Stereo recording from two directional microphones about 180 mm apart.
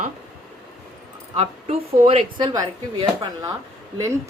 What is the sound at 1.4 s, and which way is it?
A woman's voice, 35° right (ahead or behind).